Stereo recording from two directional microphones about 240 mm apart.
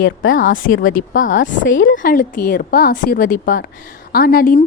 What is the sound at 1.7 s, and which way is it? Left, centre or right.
Speech, left.